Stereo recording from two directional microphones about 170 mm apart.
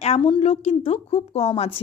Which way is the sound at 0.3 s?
35° left (ahead or behind).